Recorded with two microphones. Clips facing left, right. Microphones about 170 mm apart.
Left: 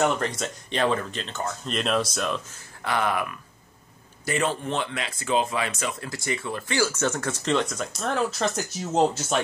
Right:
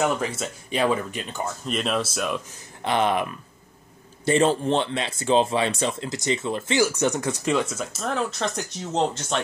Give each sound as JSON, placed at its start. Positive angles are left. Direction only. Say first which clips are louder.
{"t": 0.0, "sound": "speech", "louder": "even", "side_deg": -5}
{"t": 2.8, "sound": "speech", "louder": "right 3 dB", "side_deg": -20}